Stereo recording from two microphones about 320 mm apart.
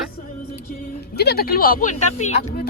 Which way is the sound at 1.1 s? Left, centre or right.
Left.